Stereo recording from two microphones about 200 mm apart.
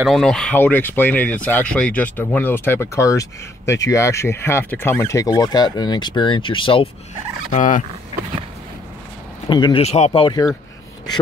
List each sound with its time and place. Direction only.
0.0 s speech: centre (ahead or behind); by 6.9 s 25° left (ahead or behind)
7.5 s speech: 40° left (ahead or behind)
9.5 s speech: 25° left (ahead or behind)